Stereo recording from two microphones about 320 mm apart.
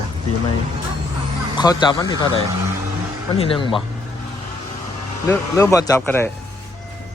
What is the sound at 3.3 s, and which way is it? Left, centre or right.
Speech, centre.